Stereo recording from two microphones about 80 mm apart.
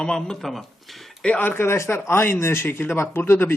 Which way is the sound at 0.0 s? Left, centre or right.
Centre.